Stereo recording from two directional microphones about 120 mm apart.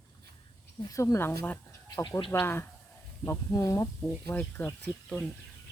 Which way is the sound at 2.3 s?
20° left (ahead or behind).